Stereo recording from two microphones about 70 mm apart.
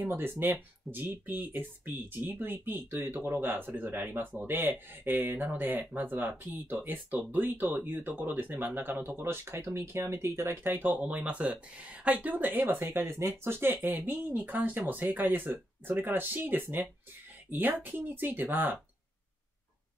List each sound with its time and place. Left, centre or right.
0.0 s speech: right